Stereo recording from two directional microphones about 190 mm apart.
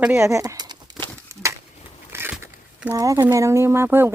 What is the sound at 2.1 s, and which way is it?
Speech, 10° right (ahead or behind).